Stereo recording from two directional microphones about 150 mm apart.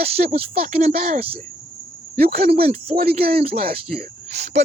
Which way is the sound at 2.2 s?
90° right.